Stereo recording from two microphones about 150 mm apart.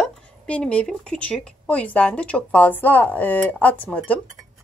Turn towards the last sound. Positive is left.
turn(degrees=10)  # may be behind; listen again after turning